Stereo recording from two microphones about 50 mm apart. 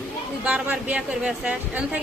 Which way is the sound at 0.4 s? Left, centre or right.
Right.